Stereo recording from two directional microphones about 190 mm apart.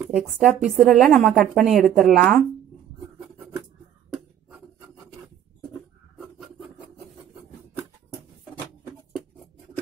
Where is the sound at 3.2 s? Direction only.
10° right (ahead or behind).